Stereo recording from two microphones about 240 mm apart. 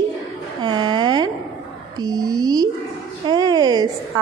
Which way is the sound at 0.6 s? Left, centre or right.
Centre.